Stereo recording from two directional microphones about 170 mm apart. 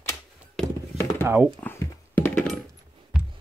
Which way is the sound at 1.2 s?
10° right (ahead or behind).